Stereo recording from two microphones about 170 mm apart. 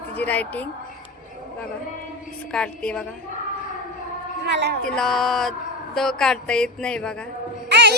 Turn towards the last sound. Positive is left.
turn(degrees=-80)